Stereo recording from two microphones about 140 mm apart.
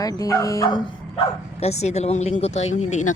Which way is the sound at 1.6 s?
50° left (ahead or behind).